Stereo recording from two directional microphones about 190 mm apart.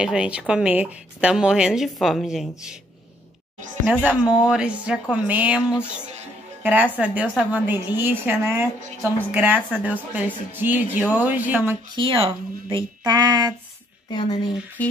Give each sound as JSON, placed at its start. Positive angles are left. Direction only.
{"t": 0.0, "sound": "speech", "side_deg": -5}
{"t": 3.8, "sound": "a woman's voice", "side_deg": -10}
{"t": 6.6, "sound": "a woman's voice", "side_deg": -10}
{"t": 11.9, "sound": "speech", "side_deg": -25}
{"t": 14.8, "sound": "music", "side_deg": 5}